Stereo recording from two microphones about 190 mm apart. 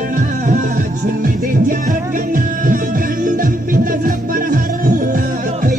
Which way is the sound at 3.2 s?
45° right (ahead or behind).